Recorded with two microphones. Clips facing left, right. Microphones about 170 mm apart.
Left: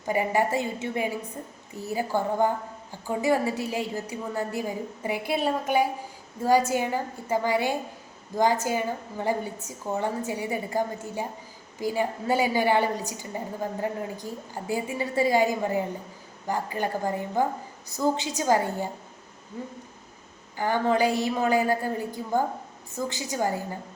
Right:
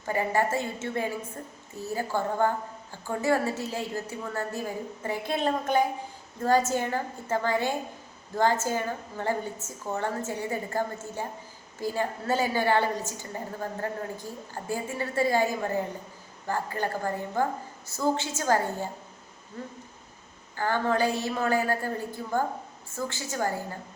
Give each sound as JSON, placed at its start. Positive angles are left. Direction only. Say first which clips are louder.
{"t": 0.1, "sound": "a woman's voice", "louder": "left 2 dB", "side_deg": 15}